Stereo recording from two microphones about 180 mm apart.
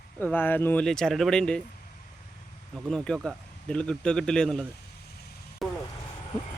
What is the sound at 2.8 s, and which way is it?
A man's voice, 5° left (ahead or behind).